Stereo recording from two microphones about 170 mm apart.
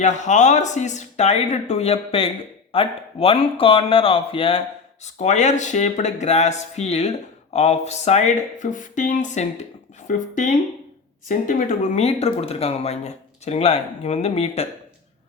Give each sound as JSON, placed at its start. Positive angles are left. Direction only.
{"t": 0.0, "sound": "speech", "side_deg": 45}